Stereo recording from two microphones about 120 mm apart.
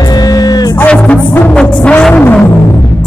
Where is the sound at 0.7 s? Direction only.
10° left (ahead or behind).